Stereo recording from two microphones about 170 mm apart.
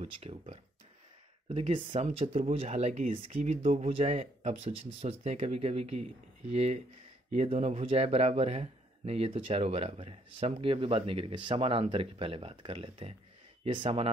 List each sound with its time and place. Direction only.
0.0 s speech: 35° right (ahead or behind)